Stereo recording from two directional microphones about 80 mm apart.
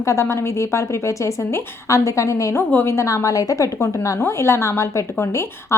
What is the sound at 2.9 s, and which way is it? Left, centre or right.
A woman's voice, left.